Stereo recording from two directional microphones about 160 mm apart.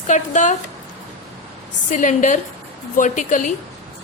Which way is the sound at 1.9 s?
50° left (ahead or behind).